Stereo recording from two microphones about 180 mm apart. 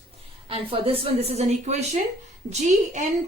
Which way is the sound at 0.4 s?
30° right (ahead or behind).